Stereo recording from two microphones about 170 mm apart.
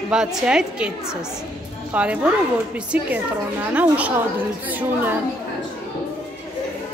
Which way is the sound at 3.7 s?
10° right (ahead or behind).